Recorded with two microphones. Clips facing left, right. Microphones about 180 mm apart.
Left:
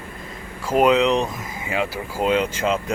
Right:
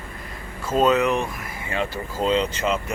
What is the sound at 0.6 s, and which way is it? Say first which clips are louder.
Speech: left 2 dB; 15° left (ahead or behind).